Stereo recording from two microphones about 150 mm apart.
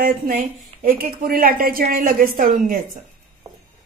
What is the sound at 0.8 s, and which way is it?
A woman's voice, 75° right (ahead or behind).